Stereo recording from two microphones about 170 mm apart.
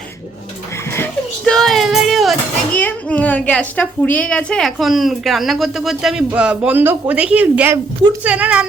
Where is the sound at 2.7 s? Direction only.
10° left (ahead or behind).